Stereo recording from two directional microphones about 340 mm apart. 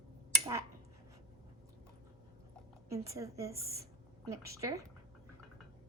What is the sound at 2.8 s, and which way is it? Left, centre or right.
Speech, centre.